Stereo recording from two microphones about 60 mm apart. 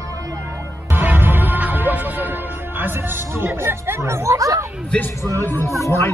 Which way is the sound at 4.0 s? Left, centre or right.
Right.